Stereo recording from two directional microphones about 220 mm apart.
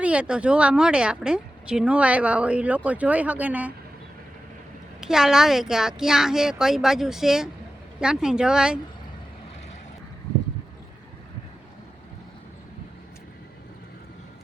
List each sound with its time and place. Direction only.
0.0 s a woman's voice: 5° right (ahead or behind)
4.9 s a woman's voice: centre (ahead or behind)